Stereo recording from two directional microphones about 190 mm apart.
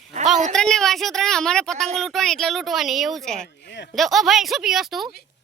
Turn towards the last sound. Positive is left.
turn(degrees=0)  # may be behind; listen again after turning